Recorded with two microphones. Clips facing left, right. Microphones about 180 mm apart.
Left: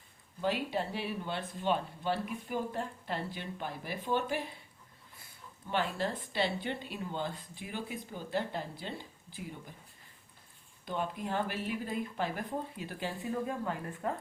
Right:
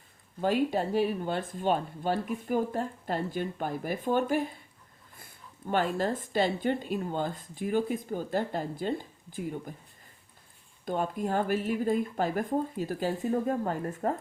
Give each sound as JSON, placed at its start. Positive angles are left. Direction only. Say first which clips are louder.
{"t": 0.4, "sound": "speech", "louder": "right 6 dB", "side_deg": -45}
{"t": 10.8, "sound": "speech", "louder": "right 6 dB", "side_deg": -45}